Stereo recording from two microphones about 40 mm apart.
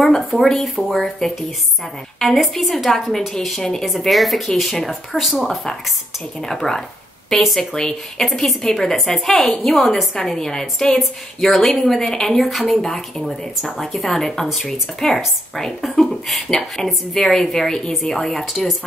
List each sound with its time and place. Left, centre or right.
0.3 s speech: centre
8.4 s speech: centre